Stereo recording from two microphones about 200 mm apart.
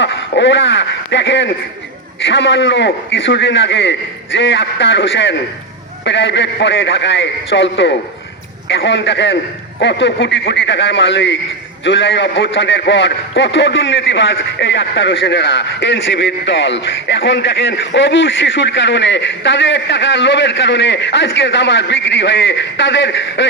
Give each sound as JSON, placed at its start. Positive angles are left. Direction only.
{"t": 0.0, "sound": "a man's voice", "side_deg": 65}